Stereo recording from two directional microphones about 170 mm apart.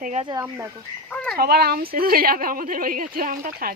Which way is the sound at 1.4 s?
65° right (ahead or behind).